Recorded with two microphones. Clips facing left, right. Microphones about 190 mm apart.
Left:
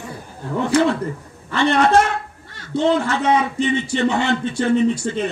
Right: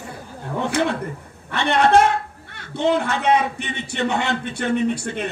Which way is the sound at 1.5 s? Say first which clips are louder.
Left 1 dB; 60° right (ahead or behind).